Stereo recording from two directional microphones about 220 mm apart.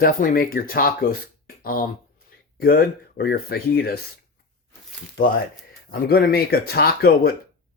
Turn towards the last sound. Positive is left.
turn(degrees=45)  # may be behind; listen again after turning